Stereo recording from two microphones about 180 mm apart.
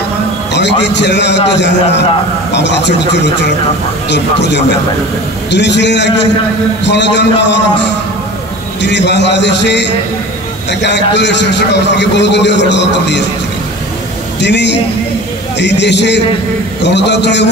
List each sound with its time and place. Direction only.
0.5 s a man's voice: 75° left (ahead or behind)
8.8 s a man's voice: 75° left (ahead or behind)
14.4 s a man's voice: 75° left (ahead or behind)